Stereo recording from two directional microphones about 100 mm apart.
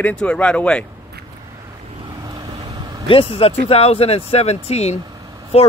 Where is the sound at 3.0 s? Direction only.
65° left (ahead or behind); by 5.7 s 90° left.